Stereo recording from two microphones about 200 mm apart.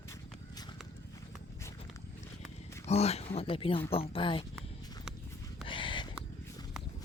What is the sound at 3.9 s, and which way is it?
Speech, 30° left (ahead or behind).